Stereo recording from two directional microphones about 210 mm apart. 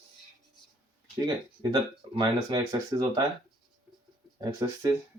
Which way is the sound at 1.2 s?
15° right (ahead or behind).